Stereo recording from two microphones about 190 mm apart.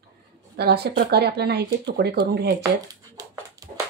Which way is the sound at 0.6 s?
55° right (ahead or behind).